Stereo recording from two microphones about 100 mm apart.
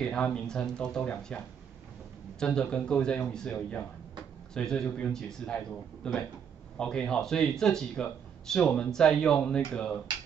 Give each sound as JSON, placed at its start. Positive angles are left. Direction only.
{"t": 0.0, "sound": "speech", "side_deg": 10}
{"t": 2.4, "sound": "speech", "side_deg": 10}